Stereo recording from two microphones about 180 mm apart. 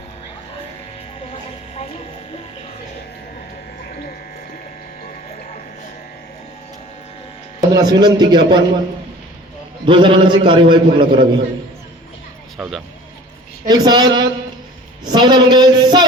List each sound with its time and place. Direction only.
1.2 s a sound: 35° left (ahead or behind)
3.8 s electric shaver: 55° left (ahead or behind)
5.0 s a sound: 40° left (ahead or behind)
7.7 s a man's voice: 20° right (ahead or behind)
9.8 s a man's voice: 25° right (ahead or behind)
12.5 s speech: 5° right (ahead or behind)
13.7 s a man's voice: 25° right (ahead or behind)